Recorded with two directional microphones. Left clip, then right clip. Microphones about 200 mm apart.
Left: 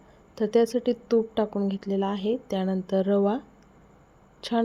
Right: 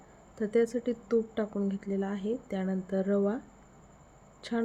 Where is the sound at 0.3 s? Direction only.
15° left (ahead or behind).